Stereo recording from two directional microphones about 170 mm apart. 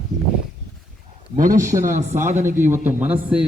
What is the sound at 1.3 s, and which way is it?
Speech, 50° right (ahead or behind).